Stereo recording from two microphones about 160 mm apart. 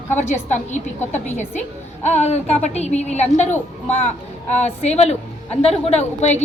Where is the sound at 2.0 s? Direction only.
45° left (ahead or behind).